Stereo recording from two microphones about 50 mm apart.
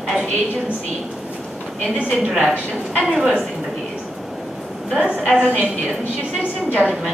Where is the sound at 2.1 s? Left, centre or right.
Centre.